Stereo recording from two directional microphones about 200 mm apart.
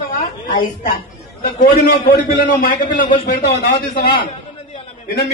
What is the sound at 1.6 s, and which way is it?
Speech, 45° left (ahead or behind).